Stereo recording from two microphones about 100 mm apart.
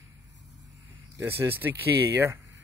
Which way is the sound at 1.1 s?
25° right (ahead or behind).